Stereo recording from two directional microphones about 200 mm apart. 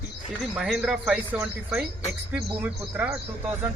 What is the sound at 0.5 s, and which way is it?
Speech, 5° right (ahead or behind).